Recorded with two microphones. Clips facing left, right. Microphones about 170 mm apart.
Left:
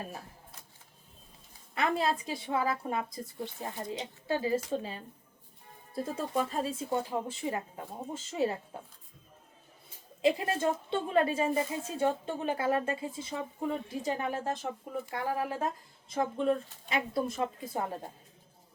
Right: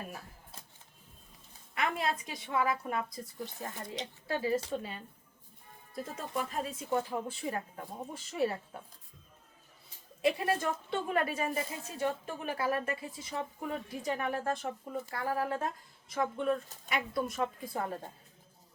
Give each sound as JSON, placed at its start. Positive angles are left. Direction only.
{"t": 1.7, "sound": "a woman's voice", "side_deg": 30}
{"t": 10.2, "sound": "a woman's voice", "side_deg": 25}